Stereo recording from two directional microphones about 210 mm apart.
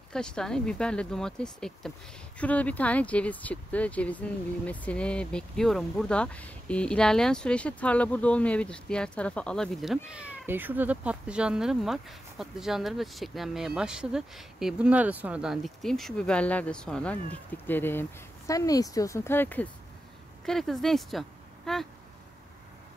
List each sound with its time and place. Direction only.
0.1 s speech: 5° left (ahead or behind)